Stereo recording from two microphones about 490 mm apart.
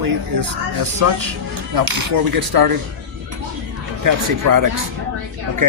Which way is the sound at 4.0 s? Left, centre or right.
Right.